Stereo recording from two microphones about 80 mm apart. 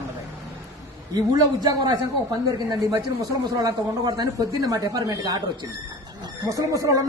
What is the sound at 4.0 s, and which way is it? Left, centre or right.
Speech, right.